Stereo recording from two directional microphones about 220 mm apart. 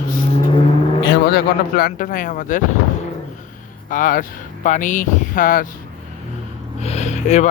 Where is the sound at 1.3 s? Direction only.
40° left (ahead or behind).